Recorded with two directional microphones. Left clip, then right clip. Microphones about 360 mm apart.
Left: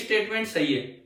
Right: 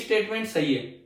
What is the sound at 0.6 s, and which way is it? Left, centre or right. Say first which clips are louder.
Speech: right 1 dB; centre.